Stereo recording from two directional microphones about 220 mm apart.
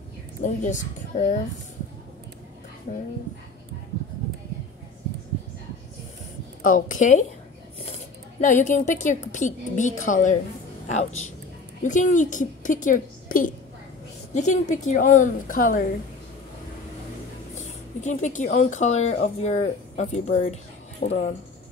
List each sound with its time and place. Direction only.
0.4 s speech: 35° left (ahead or behind)
2.9 s speech: 35° left (ahead or behind)
6.6 s speech: 35° left (ahead or behind)
8.4 s speech: 35° left (ahead or behind)
18.0 s speech: 35° left (ahead or behind)